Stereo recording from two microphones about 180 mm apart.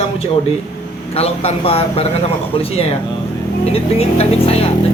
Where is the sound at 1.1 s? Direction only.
35° left (ahead or behind).